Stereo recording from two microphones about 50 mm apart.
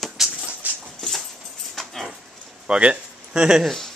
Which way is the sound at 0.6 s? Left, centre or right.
Right.